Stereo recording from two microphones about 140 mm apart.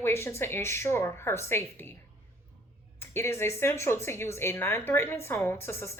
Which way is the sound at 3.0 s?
20° left (ahead or behind).